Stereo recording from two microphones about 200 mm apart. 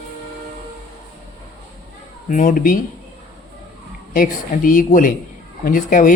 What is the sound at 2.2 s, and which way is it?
Speech, 40° left (ahead or behind).